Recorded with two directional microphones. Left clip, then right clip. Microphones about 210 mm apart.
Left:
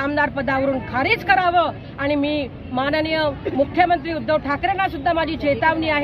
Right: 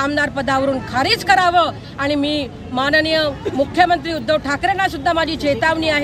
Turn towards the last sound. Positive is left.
turn(degrees=-5)  # may be behind; listen again after turning